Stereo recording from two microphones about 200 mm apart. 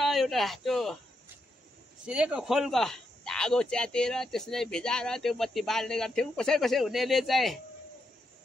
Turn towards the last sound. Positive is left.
turn(degrees=0)  # may be behind; listen again after turning